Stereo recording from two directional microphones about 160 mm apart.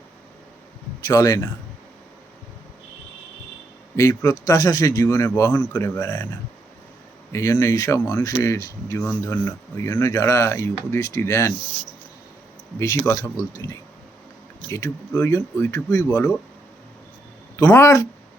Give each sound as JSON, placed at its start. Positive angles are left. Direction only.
{"t": 1.0, "sound": "a man's voice", "side_deg": 20}
{"t": 3.9, "sound": "a man's voice", "side_deg": 20}
{"t": 7.3, "sound": "a man's voice", "side_deg": 15}
{"t": 13.1, "sound": "speech", "side_deg": 20}
{"t": 14.7, "sound": "speech", "side_deg": 15}
{"t": 17.6, "sound": "speech", "side_deg": 15}